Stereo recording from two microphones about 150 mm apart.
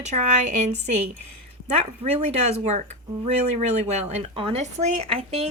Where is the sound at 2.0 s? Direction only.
45° right (ahead or behind).